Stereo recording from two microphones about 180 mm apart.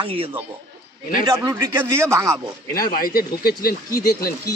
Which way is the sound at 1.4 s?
15° right (ahead or behind).